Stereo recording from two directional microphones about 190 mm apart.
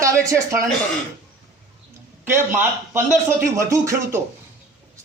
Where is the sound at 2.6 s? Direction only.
10° right (ahead or behind).